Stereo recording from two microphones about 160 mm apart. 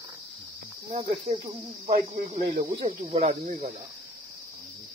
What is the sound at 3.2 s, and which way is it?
Speech, 50° right (ahead or behind).